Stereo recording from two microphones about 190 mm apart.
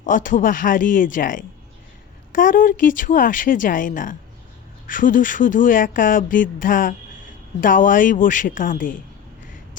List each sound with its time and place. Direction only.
0.0 s speech: 45° left (ahead or behind)